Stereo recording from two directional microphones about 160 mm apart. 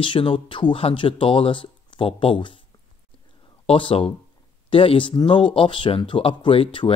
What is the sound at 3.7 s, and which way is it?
Speech, 35° left (ahead or behind).